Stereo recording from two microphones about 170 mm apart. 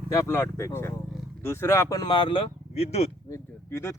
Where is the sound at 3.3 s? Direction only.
15° left (ahead or behind).